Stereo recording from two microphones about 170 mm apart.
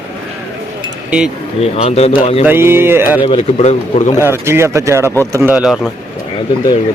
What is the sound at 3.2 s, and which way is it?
Speech, 35° left (ahead or behind).